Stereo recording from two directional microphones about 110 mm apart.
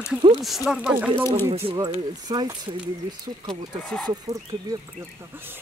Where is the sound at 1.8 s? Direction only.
40° right (ahead or behind).